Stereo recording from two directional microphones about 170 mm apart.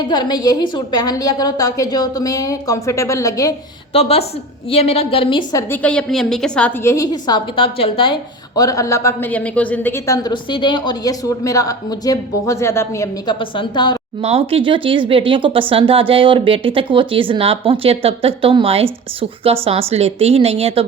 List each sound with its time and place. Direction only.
0.1 s a woman's voice: 25° left (ahead or behind)
3.9 s a woman's voice: 35° left (ahead or behind)
5.8 s a woman's voice: 5° left (ahead or behind)
6.9 s a woman's voice: 20° left (ahead or behind)
13.4 s a woman's voice: 30° left (ahead or behind)
14.2 s a woman's voice: 35° right (ahead or behind)